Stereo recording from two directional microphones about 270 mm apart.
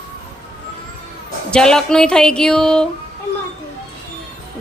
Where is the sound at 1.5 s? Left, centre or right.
Centre.